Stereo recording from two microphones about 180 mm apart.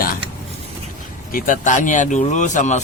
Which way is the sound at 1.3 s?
50° left (ahead or behind).